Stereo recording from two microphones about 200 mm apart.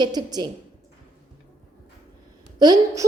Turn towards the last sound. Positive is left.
turn(degrees=-20)  # may be behind; listen again after turning